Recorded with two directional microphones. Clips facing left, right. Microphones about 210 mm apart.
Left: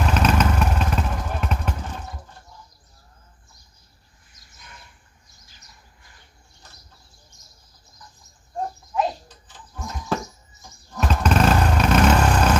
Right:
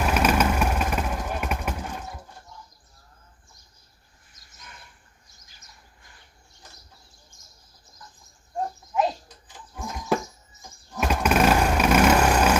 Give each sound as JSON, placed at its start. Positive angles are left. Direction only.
{"t": 0.0, "sound": "vehicle", "side_deg": -10}
{"t": 7.3, "sound": "bird", "side_deg": -50}
{"t": 9.5, "sound": "a sound", "side_deg": -10}
{"t": 10.9, "sound": "vehicle", "side_deg": -10}